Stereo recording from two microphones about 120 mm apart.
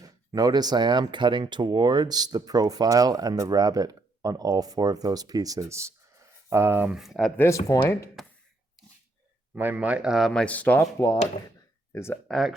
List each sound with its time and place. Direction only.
0.0 s speech: 35° right (ahead or behind)
6.9 s speech: centre (ahead or behind)
7.3 s speech: 25° left (ahead or behind)
9.6 s speech: 15° right (ahead or behind)
10.4 s speech: 10° left (ahead or behind)
11.9 s speech: 20° left (ahead or behind)
12.3 s speech: centre (ahead or behind)